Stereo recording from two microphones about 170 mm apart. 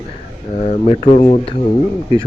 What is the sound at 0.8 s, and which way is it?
Speech, 40° left (ahead or behind).